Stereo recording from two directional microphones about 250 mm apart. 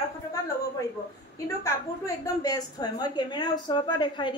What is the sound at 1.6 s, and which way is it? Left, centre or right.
A woman's voice, centre.